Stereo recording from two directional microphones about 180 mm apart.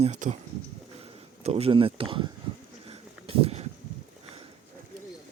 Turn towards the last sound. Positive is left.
turn(degrees=-35)  # may be behind; listen again after turning